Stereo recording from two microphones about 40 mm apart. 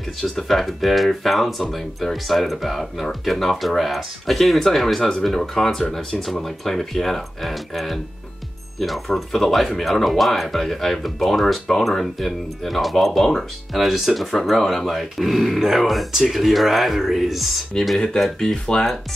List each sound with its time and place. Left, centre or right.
0.2 s speech: centre
13.7 s speech: centre
17.9 s speech: centre